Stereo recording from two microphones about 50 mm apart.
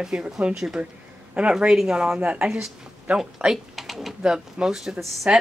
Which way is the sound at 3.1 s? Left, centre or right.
Right.